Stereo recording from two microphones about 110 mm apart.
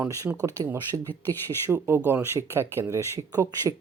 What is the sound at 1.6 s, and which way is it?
Speech, 20° right (ahead or behind).